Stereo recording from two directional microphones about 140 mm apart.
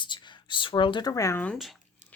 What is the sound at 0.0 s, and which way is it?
Speech, 35° left (ahead or behind).